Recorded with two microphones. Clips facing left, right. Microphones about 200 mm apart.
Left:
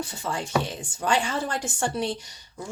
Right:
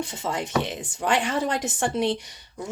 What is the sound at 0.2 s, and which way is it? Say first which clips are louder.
A woman's voice: right 1 dB; 20° right (ahead or behind).